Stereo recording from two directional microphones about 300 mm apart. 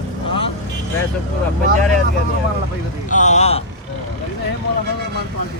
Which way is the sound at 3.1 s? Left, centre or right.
Left.